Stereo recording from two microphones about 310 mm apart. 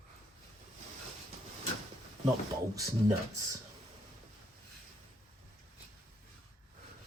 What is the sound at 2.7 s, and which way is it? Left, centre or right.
Speech, centre.